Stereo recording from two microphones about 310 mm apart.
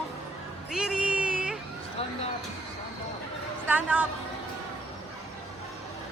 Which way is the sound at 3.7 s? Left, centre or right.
Centre.